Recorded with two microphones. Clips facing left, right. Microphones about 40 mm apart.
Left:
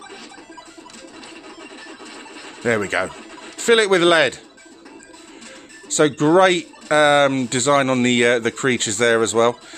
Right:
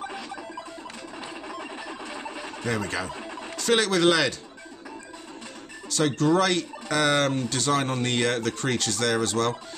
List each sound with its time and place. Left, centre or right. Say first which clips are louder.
1.6 s music: right 1 dB; centre
2.4 s speech: left 10 dB; left
5.9 s speech: left 7 dB; left